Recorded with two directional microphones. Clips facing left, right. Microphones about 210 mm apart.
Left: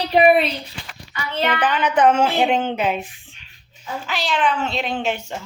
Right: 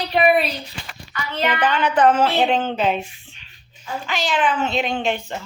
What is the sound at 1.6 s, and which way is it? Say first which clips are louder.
Speech: even; 5° left (ahead or behind).